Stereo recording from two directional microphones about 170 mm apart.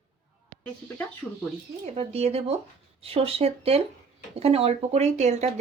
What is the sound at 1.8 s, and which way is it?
Speech, 40° right (ahead or behind).